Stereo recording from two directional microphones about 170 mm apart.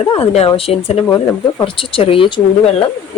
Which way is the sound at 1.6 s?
30° left (ahead or behind).